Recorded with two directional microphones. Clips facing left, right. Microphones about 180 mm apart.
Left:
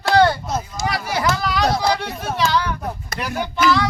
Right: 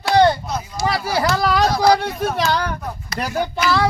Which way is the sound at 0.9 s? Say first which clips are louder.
Right 2 dB; 35° right (ahead or behind).